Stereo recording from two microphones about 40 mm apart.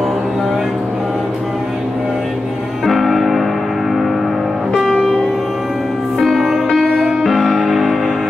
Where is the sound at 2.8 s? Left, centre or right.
Centre.